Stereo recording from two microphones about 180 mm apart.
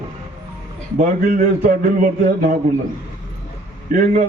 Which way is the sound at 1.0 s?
50° right (ahead or behind).